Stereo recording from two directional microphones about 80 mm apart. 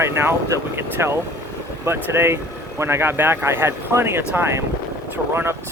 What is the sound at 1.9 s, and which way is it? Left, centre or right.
Speech, right.